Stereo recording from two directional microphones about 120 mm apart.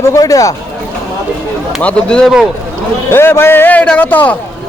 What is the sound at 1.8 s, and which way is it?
Speech, 10° left (ahead or behind).